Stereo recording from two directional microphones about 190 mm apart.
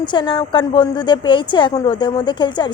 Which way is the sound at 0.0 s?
25° left (ahead or behind).